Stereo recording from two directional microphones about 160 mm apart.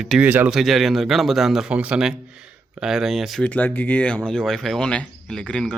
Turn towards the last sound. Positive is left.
turn(degrees=5)  # may be behind; listen again after turning